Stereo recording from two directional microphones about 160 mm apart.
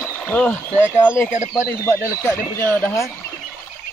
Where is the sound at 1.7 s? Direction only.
15° left (ahead or behind).